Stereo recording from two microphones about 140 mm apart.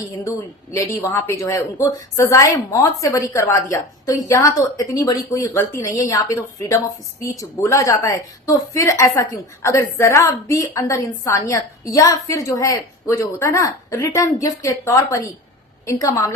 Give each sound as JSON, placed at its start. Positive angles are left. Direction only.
{"t": 0.3, "sound": "speech", "side_deg": 20}